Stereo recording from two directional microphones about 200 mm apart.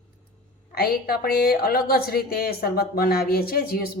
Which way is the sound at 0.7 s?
50° left (ahead or behind).